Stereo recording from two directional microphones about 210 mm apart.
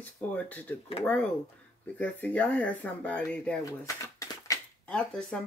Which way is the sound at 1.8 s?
5° left (ahead or behind).